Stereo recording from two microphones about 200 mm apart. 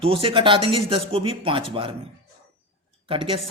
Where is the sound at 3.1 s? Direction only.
25° right (ahead or behind).